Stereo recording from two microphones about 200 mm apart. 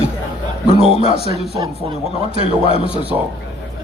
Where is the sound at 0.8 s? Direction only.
30° left (ahead or behind).